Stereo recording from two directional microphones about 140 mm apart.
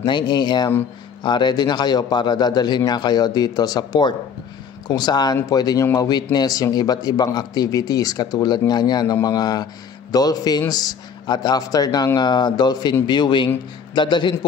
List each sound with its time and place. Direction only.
0.0 s a man's voice: 35° left (ahead or behind)